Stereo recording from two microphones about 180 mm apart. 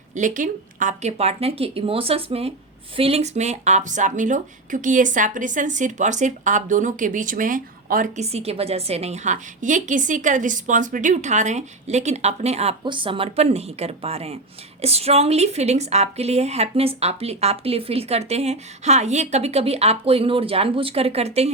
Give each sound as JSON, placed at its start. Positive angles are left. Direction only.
{"t": 0.1, "sound": "a woman's voice", "side_deg": -45}